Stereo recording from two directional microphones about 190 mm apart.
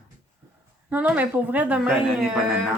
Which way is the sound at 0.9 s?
10° right (ahead or behind).